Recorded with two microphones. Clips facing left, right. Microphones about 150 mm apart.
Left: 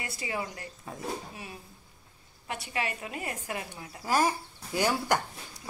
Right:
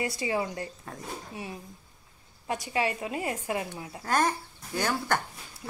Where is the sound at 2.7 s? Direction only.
25° right (ahead or behind).